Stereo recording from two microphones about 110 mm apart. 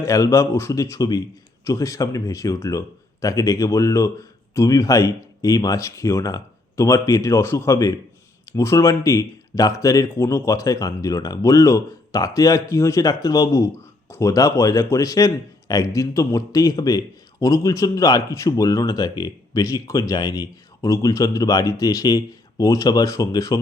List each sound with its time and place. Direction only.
0.0 s speech: 30° left (ahead or behind)